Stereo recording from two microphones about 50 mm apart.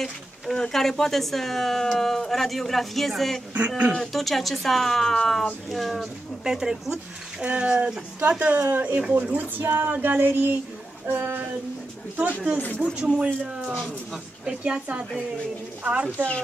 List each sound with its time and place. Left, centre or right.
0.0 s speech: centre
3.5 s speech: right
4.1 s speech: centre
5.7 s speech: centre
5.9 s speech: centre
8.2 s speech: right
8.5 s speech: right
9.6 s a sound: right
11.1 s speech: right
13.0 s speech: centre
15.8 s speech: right